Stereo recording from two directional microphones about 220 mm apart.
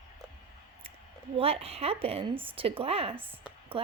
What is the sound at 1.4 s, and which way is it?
A woman's voice, 25° right (ahead or behind).